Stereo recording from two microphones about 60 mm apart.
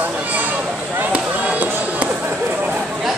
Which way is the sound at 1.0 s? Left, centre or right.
Right.